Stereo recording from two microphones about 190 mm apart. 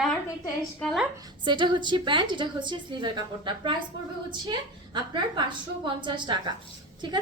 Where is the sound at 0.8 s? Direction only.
Centre (ahead or behind).